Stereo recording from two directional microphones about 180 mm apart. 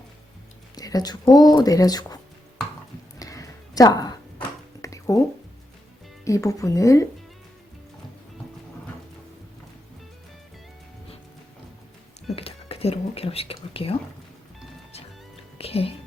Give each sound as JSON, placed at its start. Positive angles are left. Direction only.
{"t": 0.8, "sound": "speech", "side_deg": 20}
{"t": 3.2, "sound": "a sound", "side_deg": 20}
{"t": 6.2, "sound": "a woman's voice", "side_deg": 15}
{"t": 12.4, "sound": "whispering", "side_deg": 35}
{"t": 15.5, "sound": "music", "side_deg": 35}